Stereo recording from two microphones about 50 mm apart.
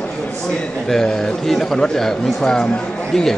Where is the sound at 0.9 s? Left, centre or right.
Centre.